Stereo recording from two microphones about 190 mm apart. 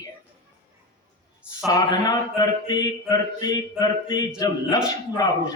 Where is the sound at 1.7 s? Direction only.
20° left (ahead or behind).